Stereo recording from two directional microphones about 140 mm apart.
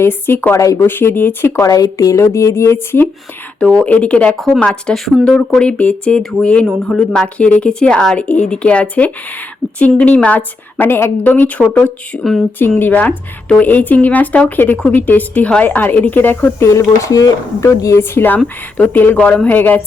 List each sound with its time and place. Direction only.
0.0 s speech: 15° left (ahead or behind)